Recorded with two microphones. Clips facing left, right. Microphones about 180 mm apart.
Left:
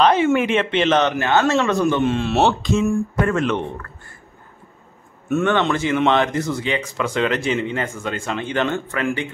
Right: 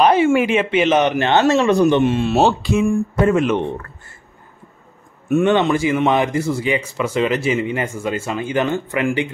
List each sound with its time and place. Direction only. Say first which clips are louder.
0.0 s a man's voice: right 2 dB; 10° right (ahead or behind)
1.1 s speech: right 3 dB; 25° right (ahead or behind)
2.1 s a man's voice: right 2 dB; centre (ahead or behind)
5.3 s a man's voice: right 4 dB; 15° right (ahead or behind)